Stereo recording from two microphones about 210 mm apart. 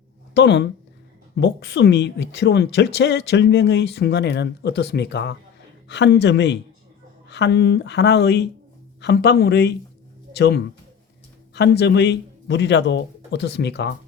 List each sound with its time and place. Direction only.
0.3 s speech: 55° left (ahead or behind)